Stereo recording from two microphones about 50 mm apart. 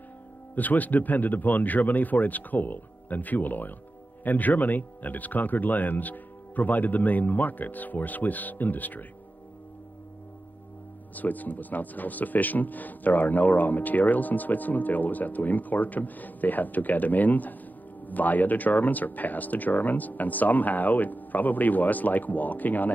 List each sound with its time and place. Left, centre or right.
0.6 s speech: left
11.1 s speech: left